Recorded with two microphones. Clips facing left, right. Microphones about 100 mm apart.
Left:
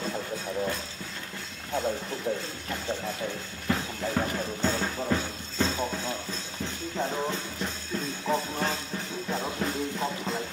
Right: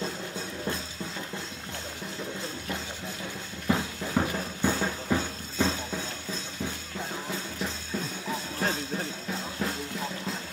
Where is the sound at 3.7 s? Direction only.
15° right (ahead or behind).